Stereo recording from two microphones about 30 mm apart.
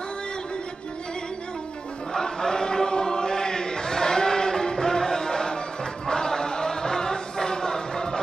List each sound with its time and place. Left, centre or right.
2.1 s chant: centre